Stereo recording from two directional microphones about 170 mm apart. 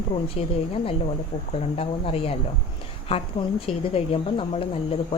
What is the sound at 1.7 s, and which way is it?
Speech, 35° left (ahead or behind).